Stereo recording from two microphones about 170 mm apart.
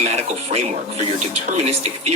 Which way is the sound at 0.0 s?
40° right (ahead or behind).